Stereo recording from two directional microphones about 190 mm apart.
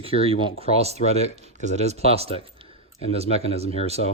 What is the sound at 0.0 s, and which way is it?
Speech, 30° right (ahead or behind).